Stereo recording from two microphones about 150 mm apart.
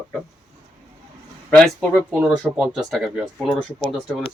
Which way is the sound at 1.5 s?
5° left (ahead or behind).